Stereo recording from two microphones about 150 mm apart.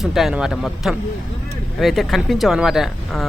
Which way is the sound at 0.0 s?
Centre (ahead or behind).